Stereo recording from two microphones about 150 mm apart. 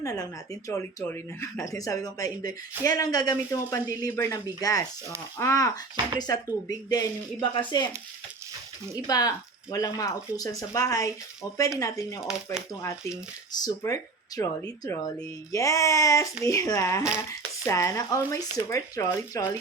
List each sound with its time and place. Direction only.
0.0 s speech: 20° left (ahead or behind)
9.0 s speech: 25° left (ahead or behind)